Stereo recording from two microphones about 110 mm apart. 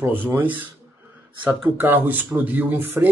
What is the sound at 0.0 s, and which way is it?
Speech, 20° right (ahead or behind).